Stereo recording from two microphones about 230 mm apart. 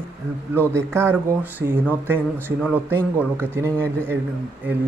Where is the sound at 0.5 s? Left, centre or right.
Centre.